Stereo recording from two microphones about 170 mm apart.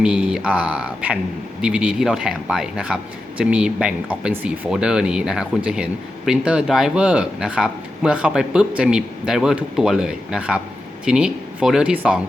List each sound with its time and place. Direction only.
0.0 s speech: 5° right (ahead or behind)